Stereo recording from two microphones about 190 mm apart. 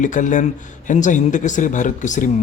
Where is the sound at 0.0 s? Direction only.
40° left (ahead or behind).